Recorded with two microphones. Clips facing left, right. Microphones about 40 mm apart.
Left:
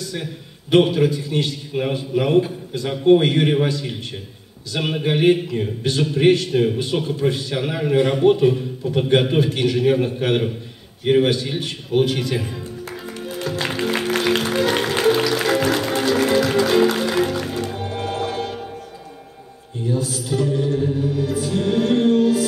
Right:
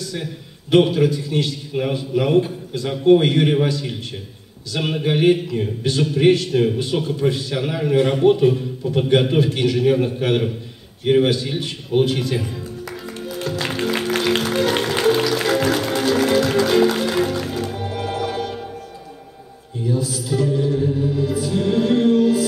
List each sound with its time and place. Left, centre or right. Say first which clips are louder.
0.1 s a man's voice: even; centre
1.7 s a man's voice: even; centre
4.7 s a man's voice: even; centre
6.5 s a man's voice: even; centre
9.4 s a man's voice: right 1 dB; centre
11.9 s a man's voice: right 1 dB; centre
13.2 s music: even; centre
19.9 s music: right 1 dB; centre